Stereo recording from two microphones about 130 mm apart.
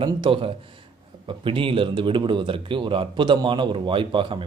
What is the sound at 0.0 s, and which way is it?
Speech, 40° right (ahead or behind).